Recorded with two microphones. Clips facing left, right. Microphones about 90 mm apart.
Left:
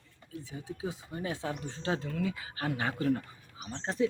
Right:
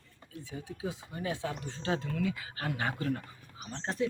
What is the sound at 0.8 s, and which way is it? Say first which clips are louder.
A woman's voice: even; 25° left (ahead or behind).